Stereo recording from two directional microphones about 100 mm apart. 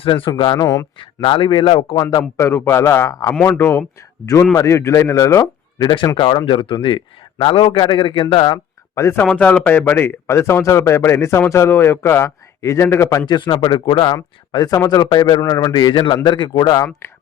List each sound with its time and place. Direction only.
0.0 s a man's voice: 60° left (ahead or behind)
0.6 s speech: 35° left (ahead or behind)
0.9 s a man's voice: 55° left (ahead or behind)
2.0 s speech: 40° left (ahead or behind)
2.4 s a man's voice: 25° left (ahead or behind)
6.1 s a man's voice: 55° left (ahead or behind)
9.0 s a man's voice: 25° left (ahead or behind)
9.2 s a man's voice: 15° left (ahead or behind); by 13.2 s 30° left (ahead or behind)
13.2 s a man's voice: 45° left (ahead or behind)
14.5 s a man's voice: 35° left (ahead or behind)